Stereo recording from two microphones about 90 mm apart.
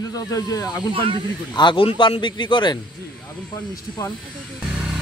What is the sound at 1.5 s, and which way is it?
A man's voice, 65° left (ahead or behind).